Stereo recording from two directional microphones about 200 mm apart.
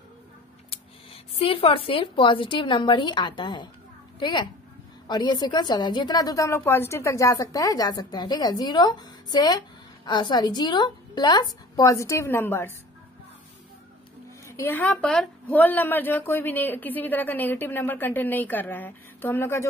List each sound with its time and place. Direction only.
0.7 s a woman's voice: 30° left (ahead or behind); by 12.7 s 10° left (ahead or behind)
14.4 s a woman's voice: 15° left (ahead or behind)